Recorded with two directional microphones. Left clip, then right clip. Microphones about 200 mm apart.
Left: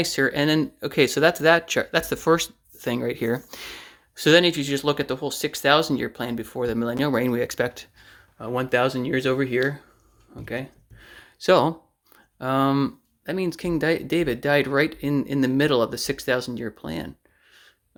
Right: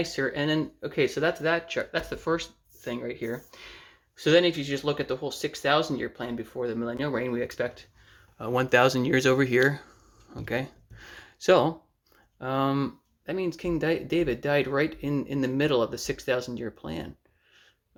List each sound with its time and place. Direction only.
0.0 s speech: 35° left (ahead or behind)
8.4 s speech: centre (ahead or behind)
12.1 s speech: 20° left (ahead or behind)